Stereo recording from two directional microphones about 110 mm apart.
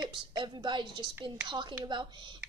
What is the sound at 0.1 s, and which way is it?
A woman's voice, 45° right (ahead or behind).